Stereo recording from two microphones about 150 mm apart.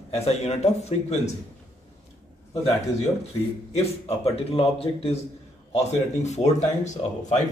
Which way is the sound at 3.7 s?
40° left (ahead or behind).